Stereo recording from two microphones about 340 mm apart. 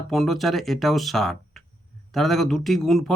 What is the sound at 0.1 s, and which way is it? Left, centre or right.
Speech, centre.